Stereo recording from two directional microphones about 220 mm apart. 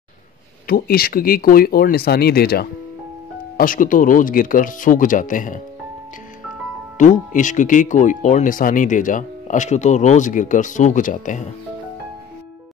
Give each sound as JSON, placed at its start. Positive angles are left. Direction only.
{"t": 0.7, "sound": "speech", "side_deg": 45}
{"t": 7.0, "sound": "speech", "side_deg": 35}